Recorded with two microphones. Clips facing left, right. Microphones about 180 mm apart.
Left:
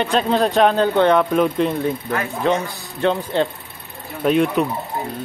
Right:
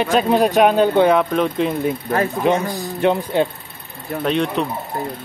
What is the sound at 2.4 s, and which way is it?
Speech, 20° right (ahead or behind).